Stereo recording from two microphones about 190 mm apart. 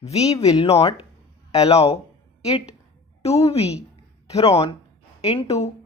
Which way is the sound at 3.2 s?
30° left (ahead or behind).